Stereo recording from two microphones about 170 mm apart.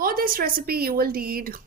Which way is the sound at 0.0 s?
60° right (ahead or behind).